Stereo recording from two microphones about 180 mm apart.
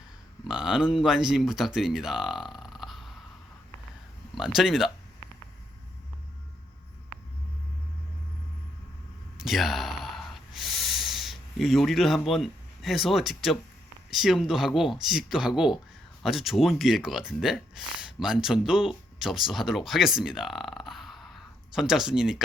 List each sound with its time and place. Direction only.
0.4 s speech: 5° right (ahead or behind)
4.4 s speech: centre (ahead or behind)
9.4 s sigh: centre (ahead or behind)
14.1 s speech: centre (ahead or behind)